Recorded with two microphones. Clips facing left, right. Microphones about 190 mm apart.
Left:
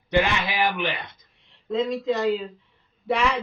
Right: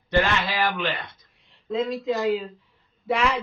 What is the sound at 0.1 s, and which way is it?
Speech, 15° left (ahead or behind).